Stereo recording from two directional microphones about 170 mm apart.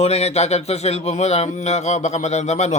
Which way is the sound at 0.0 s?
40° left (ahead or behind).